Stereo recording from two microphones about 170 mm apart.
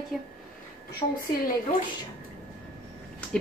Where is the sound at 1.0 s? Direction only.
40° left (ahead or behind).